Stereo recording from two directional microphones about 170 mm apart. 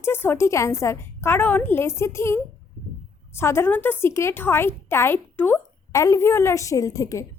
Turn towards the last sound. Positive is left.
turn(degrees=20)  # may be behind; listen again after turning